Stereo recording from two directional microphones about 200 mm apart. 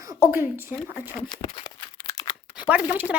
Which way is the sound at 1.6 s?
20° left (ahead or behind).